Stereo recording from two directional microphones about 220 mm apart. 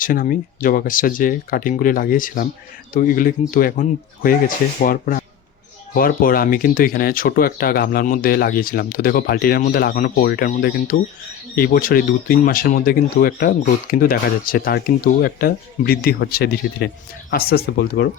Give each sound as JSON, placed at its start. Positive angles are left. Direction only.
{"t": 0.0, "sound": "speech", "side_deg": 40}